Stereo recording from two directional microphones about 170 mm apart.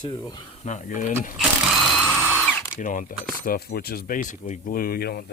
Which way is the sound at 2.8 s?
50° left (ahead or behind).